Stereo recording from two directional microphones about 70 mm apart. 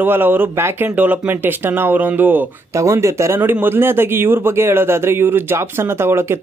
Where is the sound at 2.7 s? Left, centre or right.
Right.